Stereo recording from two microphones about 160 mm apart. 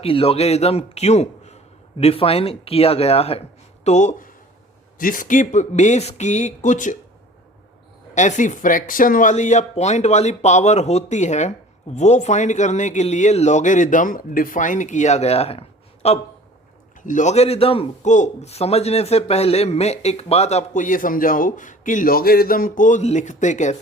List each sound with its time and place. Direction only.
0.0 s a man's voice: 35° left (ahead or behind)
4.9 s speech: 60° left (ahead or behind)
8.1 s a man's voice: 50° left (ahead or behind)
17.0 s speech: 55° left (ahead or behind)